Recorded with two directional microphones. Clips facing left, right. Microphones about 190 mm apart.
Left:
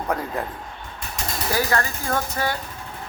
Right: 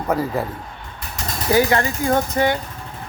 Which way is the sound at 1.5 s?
20° right (ahead or behind).